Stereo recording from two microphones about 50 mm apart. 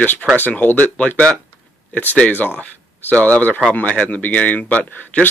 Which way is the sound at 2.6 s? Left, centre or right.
Left.